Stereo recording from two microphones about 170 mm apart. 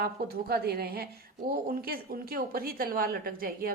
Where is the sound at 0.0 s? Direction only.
65° right (ahead or behind).